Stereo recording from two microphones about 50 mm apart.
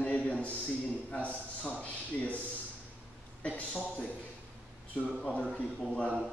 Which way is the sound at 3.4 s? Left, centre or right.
Left.